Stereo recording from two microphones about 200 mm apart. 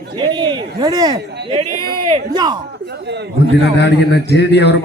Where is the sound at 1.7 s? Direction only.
50° right (ahead or behind).